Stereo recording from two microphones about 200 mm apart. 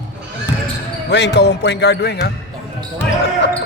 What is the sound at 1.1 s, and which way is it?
Speech, 60° left (ahead or behind).